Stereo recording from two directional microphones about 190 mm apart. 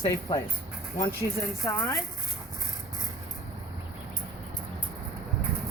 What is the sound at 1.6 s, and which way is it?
Speech, 15° left (ahead or behind).